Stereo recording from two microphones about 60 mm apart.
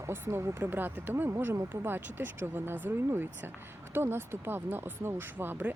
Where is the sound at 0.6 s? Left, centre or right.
Right.